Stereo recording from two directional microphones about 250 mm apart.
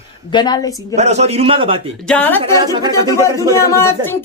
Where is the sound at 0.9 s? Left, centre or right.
Right.